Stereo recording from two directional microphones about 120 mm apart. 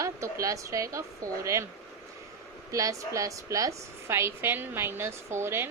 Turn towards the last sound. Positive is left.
turn(degrees=-20)  # may be behind; listen again after turning